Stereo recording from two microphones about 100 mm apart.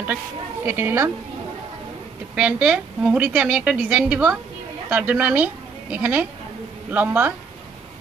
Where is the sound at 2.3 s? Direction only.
15° right (ahead or behind).